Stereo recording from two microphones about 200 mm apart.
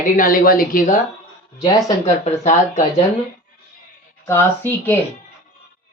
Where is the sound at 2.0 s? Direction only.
35° left (ahead or behind).